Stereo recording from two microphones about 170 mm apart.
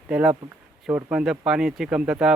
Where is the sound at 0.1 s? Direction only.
5° right (ahead or behind).